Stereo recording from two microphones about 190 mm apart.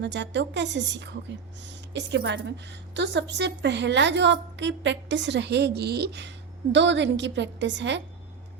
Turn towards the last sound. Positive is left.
turn(degrees=-70)  # may be behind; listen again after turning